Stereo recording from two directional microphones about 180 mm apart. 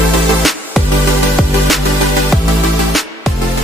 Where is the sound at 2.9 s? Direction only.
Centre (ahead or behind).